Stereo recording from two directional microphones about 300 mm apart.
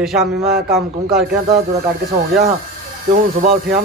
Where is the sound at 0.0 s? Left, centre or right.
Centre.